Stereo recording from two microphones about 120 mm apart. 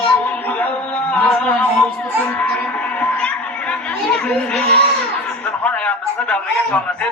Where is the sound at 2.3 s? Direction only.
10° left (ahead or behind).